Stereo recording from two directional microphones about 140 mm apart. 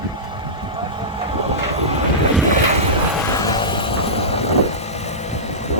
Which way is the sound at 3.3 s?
30° left (ahead or behind).